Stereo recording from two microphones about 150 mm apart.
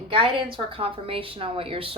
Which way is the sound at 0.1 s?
35° right (ahead or behind).